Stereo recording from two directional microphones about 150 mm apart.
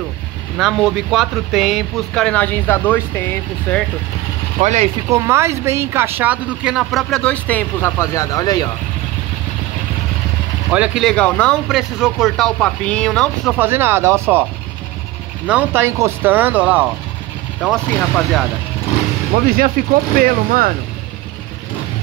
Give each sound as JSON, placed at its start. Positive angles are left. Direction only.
{"t": 0.6, "sound": "speech", "side_deg": 0}
{"t": 4.6, "sound": "speech", "side_deg": -50}
{"t": 5.1, "sound": "speech", "side_deg": -20}
{"t": 10.7, "sound": "speech", "side_deg": -10}
{"t": 11.1, "sound": "speech", "side_deg": 5}
{"t": 13.6, "sound": "speech", "side_deg": -15}
{"t": 15.4, "sound": "speech", "side_deg": -10}
{"t": 17.8, "sound": "speech", "side_deg": 10}
{"t": 19.3, "sound": "speech", "side_deg": -75}